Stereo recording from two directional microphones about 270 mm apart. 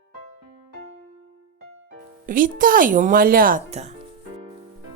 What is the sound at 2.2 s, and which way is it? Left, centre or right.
Speech, right.